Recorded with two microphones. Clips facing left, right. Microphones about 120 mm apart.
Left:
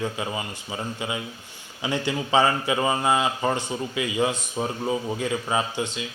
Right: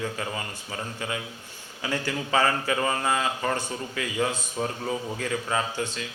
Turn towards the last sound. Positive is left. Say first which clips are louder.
# left 2 dB
turn(degrees=15)  # may be behind; listen again after turning